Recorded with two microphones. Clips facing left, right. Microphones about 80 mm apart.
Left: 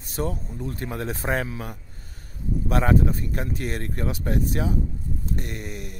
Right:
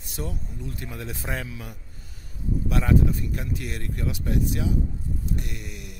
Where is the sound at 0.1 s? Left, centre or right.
Left.